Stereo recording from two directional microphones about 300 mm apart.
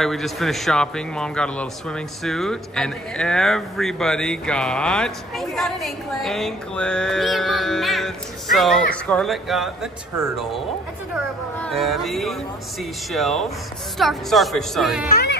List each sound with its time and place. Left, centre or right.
0.0 s a man's voice: centre
10.1 s speech: centre
11.6 s a man's voice: centre
15.0 s speech: left